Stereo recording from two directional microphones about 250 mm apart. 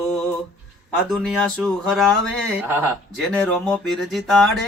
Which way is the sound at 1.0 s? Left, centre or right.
Centre.